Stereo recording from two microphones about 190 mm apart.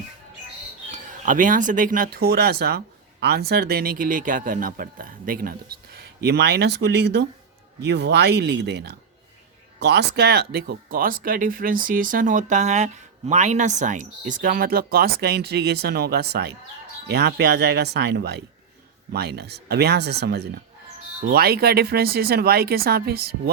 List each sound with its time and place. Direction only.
0.9 s speech: 40° right (ahead or behind)